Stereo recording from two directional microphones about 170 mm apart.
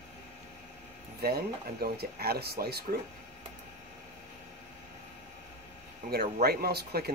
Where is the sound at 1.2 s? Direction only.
65° right (ahead or behind).